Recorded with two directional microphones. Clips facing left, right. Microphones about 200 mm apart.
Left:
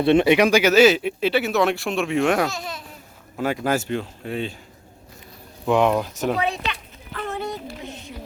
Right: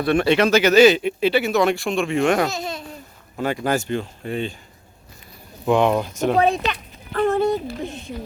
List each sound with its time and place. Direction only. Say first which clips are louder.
0.0 s speech: left 2 dB; 20° left (ahead or behind); by 2.5 s centre (ahead or behind)
2.5 s speech: right 4 dB; 25° right (ahead or behind)
3.3 s speech: right 1 dB; centre (ahead or behind)
5.6 s speech: right 1 dB; centre (ahead or behind)
6.3 s a sound: right 6 dB; 45° right (ahead or behind)